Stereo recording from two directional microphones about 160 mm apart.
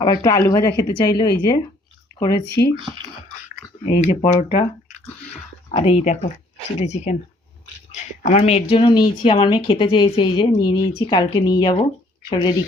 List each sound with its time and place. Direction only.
0.2 s speech: 20° left (ahead or behind)
4.0 s a woman's voice: 40° left (ahead or behind)
5.7 s a woman's voice: 40° left (ahead or behind)